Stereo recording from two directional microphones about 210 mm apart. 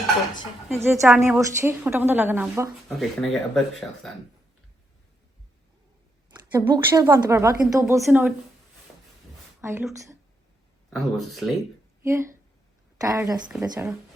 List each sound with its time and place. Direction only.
0.7 s a woman's voice: 10° right (ahead or behind)
3.2 s speech: centre (ahead or behind)
6.3 s a woman's voice: 15° right (ahead or behind)
9.6 s a woman's voice: 10° right (ahead or behind)
10.8 s speech: centre (ahead or behind)
12.0 s a woman's voice: 15° right (ahead or behind)
13.5 s a woman's voice: 5° right (ahead or behind)